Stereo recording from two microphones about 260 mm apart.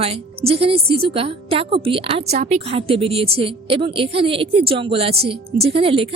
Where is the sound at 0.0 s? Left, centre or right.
Right.